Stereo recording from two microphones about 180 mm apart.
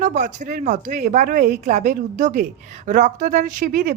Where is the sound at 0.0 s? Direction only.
45° right (ahead or behind).